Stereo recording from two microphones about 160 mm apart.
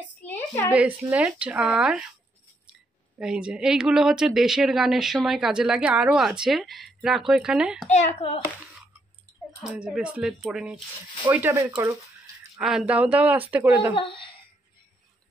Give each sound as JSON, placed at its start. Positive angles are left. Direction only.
{"t": 0.2, "sound": "a sound", "side_deg": 15}
{"t": 0.7, "sound": "speech", "side_deg": -5}
{"t": 3.2, "sound": "speech", "side_deg": -5}
{"t": 7.9, "sound": "a child's voice", "side_deg": 40}
{"t": 9.6, "sound": "speech", "side_deg": -5}
{"t": 13.9, "sound": "a child's voice", "side_deg": 30}